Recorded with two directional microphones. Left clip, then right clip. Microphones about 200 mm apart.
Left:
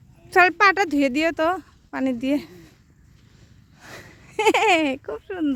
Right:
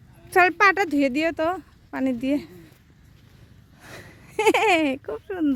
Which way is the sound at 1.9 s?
10° left (ahead or behind).